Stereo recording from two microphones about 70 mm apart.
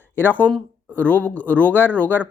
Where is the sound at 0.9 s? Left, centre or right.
Left.